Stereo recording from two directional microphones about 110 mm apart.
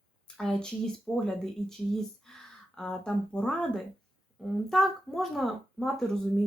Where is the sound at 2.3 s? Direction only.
5° left (ahead or behind).